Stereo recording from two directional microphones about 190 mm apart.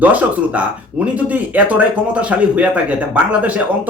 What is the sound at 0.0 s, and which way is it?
Speech, 10° right (ahead or behind).